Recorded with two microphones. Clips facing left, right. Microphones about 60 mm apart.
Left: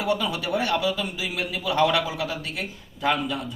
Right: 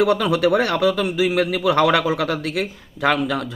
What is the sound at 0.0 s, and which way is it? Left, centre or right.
Speech, right.